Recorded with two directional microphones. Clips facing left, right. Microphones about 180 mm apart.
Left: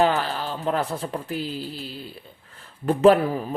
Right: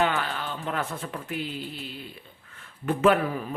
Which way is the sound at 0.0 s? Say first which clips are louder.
Left 5 dB; 35° left (ahead or behind).